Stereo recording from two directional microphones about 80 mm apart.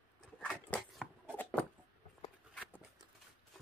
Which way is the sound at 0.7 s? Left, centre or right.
Left.